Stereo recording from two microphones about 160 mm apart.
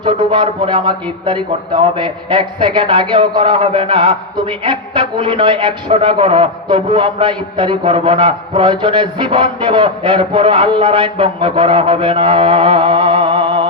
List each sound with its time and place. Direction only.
0.0 s a man's voice: 30° right (ahead or behind)